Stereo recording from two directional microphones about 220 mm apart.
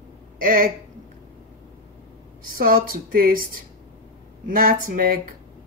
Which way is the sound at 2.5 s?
40° right (ahead or behind).